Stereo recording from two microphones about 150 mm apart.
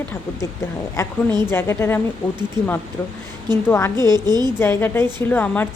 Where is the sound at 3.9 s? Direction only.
25° right (ahead or behind).